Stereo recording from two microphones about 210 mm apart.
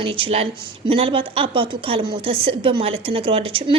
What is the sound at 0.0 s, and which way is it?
A woman's voice, 25° right (ahead or behind).